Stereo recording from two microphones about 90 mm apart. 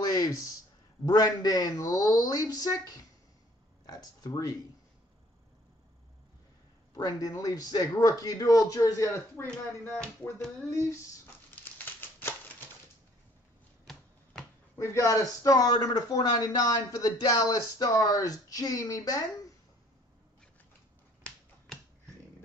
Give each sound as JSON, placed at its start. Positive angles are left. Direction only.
{"t": 0.0, "sound": "a sound", "side_deg": 40}
{"t": 1.0, "sound": "a man's voice", "side_deg": 45}
{"t": 6.9, "sound": "a man's voice", "side_deg": 45}
{"t": 11.6, "sound": "typewriter", "side_deg": 20}
{"t": 14.8, "sound": "a man's voice", "side_deg": 35}